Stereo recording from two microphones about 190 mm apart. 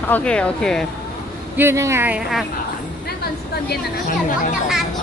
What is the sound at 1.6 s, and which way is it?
Speech, 15° right (ahead or behind).